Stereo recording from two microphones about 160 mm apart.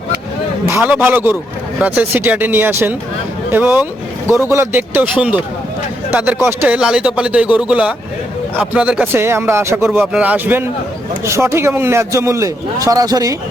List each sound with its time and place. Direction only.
0.8 s speech: 10° right (ahead or behind)